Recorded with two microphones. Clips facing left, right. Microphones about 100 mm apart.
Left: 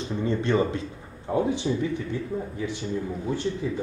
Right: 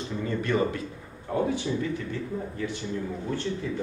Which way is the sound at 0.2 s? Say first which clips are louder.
Left 3 dB; 25° left (ahead or behind).